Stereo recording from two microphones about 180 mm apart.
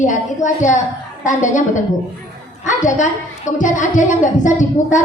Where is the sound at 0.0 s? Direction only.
45° left (ahead or behind).